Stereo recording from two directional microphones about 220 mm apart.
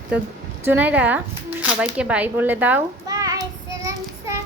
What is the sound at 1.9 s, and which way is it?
Child singing, 5° right (ahead or behind).